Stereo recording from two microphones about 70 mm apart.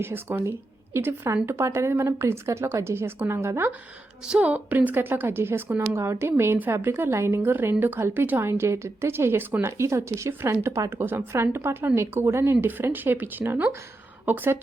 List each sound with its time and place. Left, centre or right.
0.0 s speech: right
4.3 s speech: centre; by 12.5 s right
12.6 s speech: right